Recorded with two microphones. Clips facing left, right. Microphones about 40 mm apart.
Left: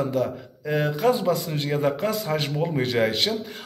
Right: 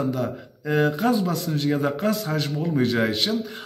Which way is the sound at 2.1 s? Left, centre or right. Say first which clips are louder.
Right 2 dB; centre.